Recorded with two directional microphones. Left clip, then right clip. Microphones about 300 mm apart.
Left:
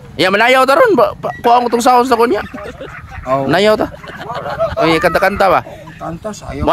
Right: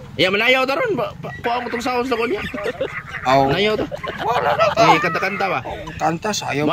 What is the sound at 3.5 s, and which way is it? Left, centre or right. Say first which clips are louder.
Speech: left 8 dB; centre.